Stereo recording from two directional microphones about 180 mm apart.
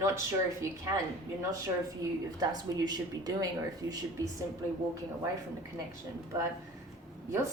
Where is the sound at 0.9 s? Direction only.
20° right (ahead or behind).